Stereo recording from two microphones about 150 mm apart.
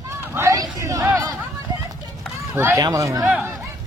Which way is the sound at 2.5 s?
20° right (ahead or behind).